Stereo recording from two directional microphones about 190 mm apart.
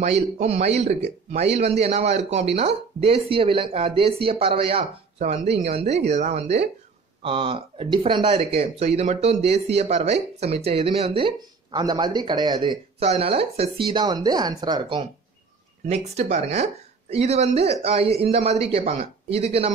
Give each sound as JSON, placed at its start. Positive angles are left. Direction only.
{"t": 0.0, "sound": "speech", "side_deg": -35}
{"t": 15.9, "sound": "speech", "side_deg": -35}